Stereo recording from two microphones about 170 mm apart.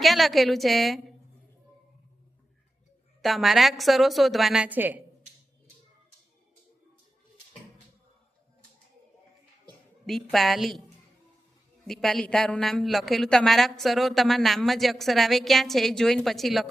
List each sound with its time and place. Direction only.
0.0 s a woman's voice: centre (ahead or behind)
3.2 s a woman's voice: centre (ahead or behind)
10.1 s a woman's voice: centre (ahead or behind)
11.9 s a woman's voice: centre (ahead or behind)